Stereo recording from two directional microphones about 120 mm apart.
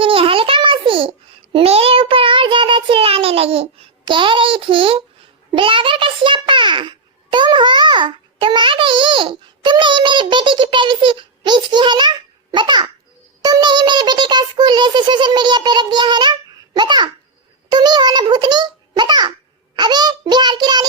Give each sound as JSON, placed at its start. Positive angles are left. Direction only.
{"t": 0.0, "sound": "a sound", "side_deg": -50}
{"t": 1.5, "sound": "child singing", "side_deg": -55}
{"t": 5.5, "sound": "a child's voice", "side_deg": -45}